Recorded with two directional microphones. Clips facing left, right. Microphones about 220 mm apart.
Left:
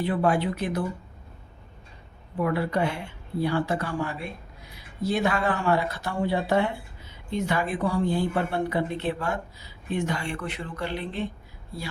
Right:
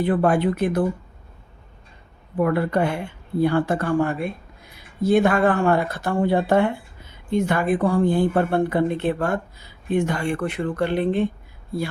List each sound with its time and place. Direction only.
0.0 s speech: 50° right (ahead or behind)
2.4 s speech: 50° right (ahead or behind)